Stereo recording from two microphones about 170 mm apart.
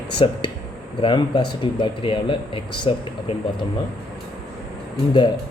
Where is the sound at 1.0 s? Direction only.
30° left (ahead or behind).